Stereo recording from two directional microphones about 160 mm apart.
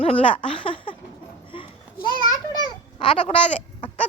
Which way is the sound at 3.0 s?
35° left (ahead or behind).